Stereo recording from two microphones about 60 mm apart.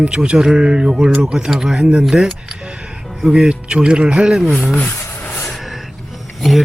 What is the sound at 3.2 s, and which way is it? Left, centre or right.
Speech, centre.